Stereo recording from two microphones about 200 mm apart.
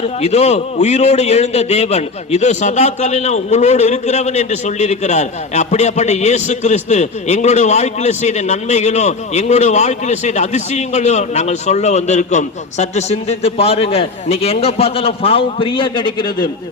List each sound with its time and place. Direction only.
0.2 s a man's voice: 35° left (ahead or behind)